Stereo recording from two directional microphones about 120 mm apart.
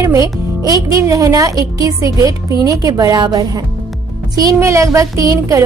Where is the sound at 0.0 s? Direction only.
30° right (ahead or behind).